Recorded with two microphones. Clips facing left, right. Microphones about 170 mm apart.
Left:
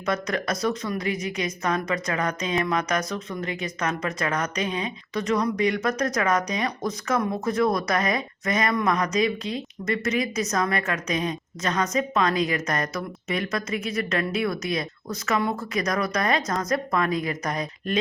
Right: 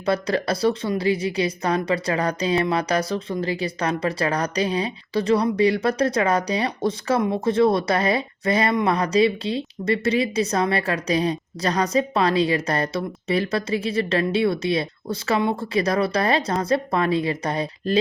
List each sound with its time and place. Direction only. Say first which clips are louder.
0.0 s a woman's voice: right 4 dB; 30° right (ahead or behind)